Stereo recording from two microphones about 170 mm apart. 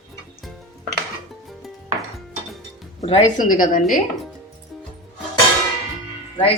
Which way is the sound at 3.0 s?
40° left (ahead or behind).